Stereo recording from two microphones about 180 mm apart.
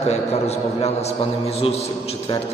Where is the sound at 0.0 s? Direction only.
35° left (ahead or behind).